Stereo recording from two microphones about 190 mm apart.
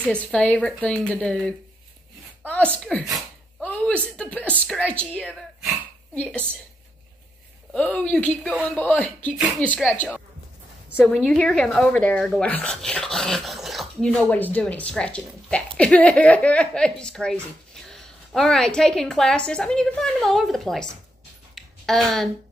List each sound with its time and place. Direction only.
0.0 s a woman's voice: 5° left (ahead or behind)
7.7 s speech: 5° left (ahead or behind)
11.0 s a woman's voice: 5° left (ahead or behind)
21.5 s a sound: centre (ahead or behind)